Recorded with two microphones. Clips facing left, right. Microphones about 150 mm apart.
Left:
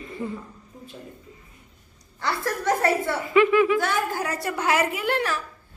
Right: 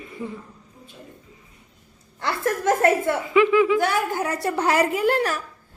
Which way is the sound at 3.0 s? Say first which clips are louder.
Right 1 dB; 15° right (ahead or behind).